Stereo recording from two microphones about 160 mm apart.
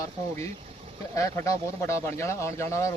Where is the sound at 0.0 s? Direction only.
15° left (ahead or behind).